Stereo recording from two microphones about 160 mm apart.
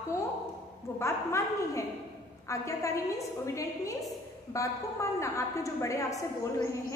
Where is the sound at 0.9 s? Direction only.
15° left (ahead or behind).